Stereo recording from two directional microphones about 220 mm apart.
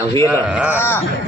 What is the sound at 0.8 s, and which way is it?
Speech, 10° left (ahead or behind).